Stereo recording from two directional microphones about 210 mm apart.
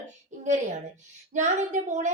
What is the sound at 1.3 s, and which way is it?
Speech, 35° right (ahead or behind).